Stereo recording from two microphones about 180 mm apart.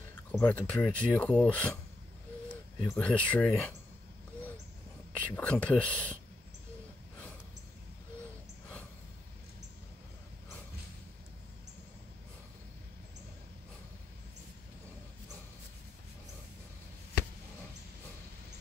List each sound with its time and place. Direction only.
0.3 s speech: 10° left (ahead or behind)
2.9 s speech: 5° left (ahead or behind)
5.1 s speech: 5° left (ahead or behind)